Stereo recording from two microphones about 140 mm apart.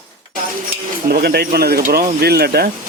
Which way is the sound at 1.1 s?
90° right.